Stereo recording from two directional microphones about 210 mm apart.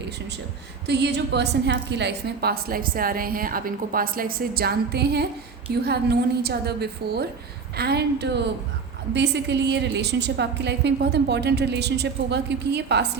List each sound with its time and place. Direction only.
0.9 s a woman's voice: 55° right (ahead or behind)